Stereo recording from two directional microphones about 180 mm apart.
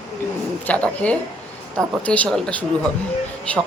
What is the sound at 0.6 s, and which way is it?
Speech, 5° left (ahead or behind).